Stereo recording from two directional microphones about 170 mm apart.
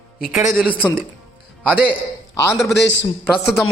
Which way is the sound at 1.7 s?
5° right (ahead or behind).